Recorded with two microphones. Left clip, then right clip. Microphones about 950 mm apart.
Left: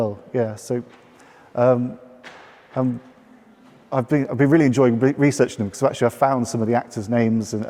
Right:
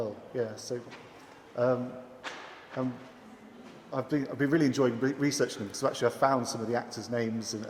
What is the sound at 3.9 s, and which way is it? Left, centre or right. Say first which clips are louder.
Speech: left 11 dB; left.